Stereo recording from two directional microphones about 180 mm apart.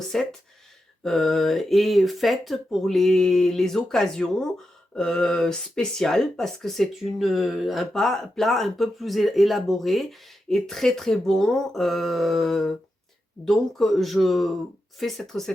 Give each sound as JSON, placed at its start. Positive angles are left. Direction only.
{"t": 0.1, "sound": "speech", "side_deg": 5}